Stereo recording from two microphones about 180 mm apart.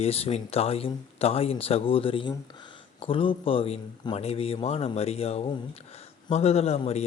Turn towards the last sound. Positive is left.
turn(degrees=35)  # may be behind; listen again after turning